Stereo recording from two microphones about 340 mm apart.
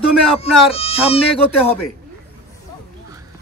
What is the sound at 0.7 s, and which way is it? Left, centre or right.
Speech, centre.